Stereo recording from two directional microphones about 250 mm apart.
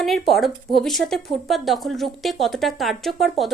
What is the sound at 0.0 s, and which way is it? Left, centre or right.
Speech, centre.